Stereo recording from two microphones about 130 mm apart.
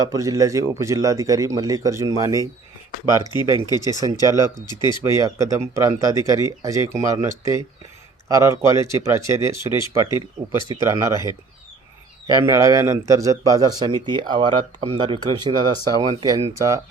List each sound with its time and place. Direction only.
0.0 s speech: 25° right (ahead or behind)
3.2 s speech: 30° left (ahead or behind)
4.0 s speech: 25° right (ahead or behind)
4.4 s speech: 35° left (ahead or behind)
5.0 s speech: 25° right (ahead or behind)
11.1 s speech: 30° left (ahead or behind)
12.3 s speech: 20° right (ahead or behind)